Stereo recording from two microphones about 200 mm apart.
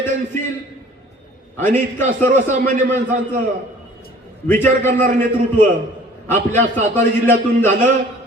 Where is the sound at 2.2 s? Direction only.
40° right (ahead or behind).